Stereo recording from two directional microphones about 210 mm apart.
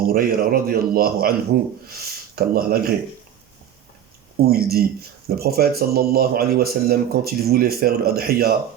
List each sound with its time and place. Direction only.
0.1 s speech: 45° right (ahead or behind)
4.4 s speech: 45° right (ahead or behind)